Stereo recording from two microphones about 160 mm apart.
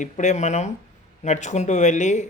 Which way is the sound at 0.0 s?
50° left (ahead or behind).